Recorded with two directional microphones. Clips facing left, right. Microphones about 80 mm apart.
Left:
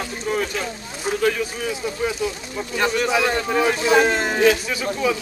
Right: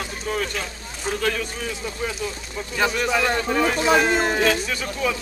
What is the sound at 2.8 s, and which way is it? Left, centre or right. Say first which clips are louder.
A man's voice: left 1 dB; centre.